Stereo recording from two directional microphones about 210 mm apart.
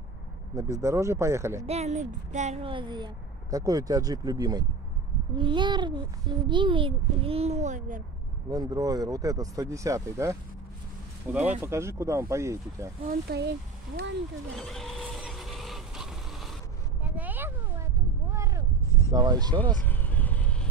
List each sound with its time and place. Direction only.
0.6 s speech: 15° right (ahead or behind)
1.7 s speech: 30° right (ahead or behind)
8.5 s speech: 15° right (ahead or behind)
13.1 s speech: 50° right (ahead or behind)
14.6 s vehicle: centre (ahead or behind)
17.0 s a sound: 5° right (ahead or behind)
18.9 s a sound: 15° left (ahead or behind)
19.1 s speech: 20° right (ahead or behind)
19.8 s vehicle: 10° left (ahead or behind)